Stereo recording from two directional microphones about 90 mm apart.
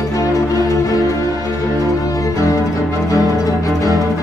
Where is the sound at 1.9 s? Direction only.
40° left (ahead or behind).